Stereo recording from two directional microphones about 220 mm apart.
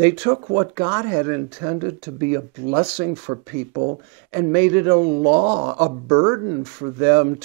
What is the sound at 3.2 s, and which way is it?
Speech, 25° right (ahead or behind).